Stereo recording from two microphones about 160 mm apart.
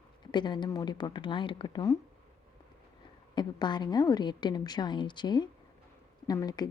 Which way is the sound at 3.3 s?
25° left (ahead or behind).